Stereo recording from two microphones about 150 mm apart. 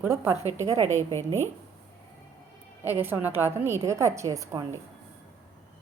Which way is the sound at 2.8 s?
15° right (ahead or behind).